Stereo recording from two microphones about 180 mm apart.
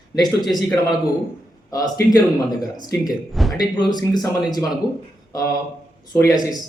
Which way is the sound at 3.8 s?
20° left (ahead or behind).